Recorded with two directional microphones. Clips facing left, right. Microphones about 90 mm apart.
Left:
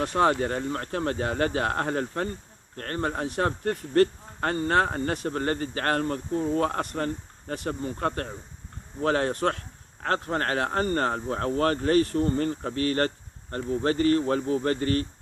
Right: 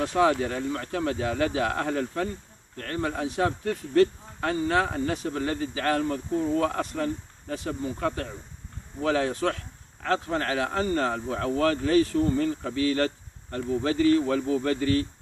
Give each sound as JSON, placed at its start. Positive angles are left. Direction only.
{"t": 0.0, "sound": "speech", "side_deg": 55}